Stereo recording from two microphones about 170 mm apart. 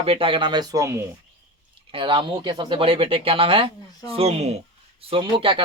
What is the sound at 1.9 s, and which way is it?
A man's voice, 30° right (ahead or behind).